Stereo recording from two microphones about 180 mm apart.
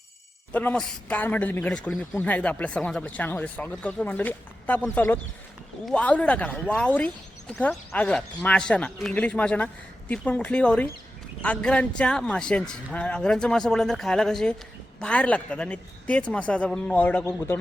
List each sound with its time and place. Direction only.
0.5 s a woman's voice: 5° left (ahead or behind)